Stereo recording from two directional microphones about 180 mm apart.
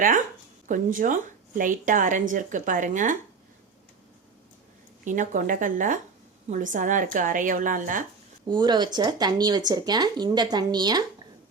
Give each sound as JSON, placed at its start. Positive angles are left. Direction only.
{"t": 0.7, "sound": "a woman's voice", "side_deg": -50}
{"t": 5.0, "sound": "a woman's voice", "side_deg": -45}
{"t": 8.4, "sound": "speech", "side_deg": -25}